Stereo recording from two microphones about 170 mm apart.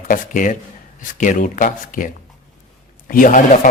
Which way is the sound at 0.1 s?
50° left (ahead or behind).